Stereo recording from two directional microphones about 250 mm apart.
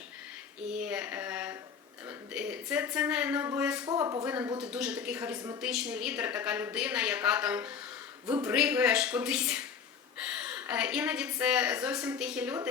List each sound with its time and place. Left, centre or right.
0.7 s a sound: centre
2.0 s a woman's voice: centre
3.8 s a woman's voice: centre